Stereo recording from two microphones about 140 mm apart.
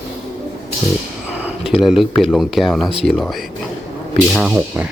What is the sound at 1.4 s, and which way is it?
Speech, 5° right (ahead or behind).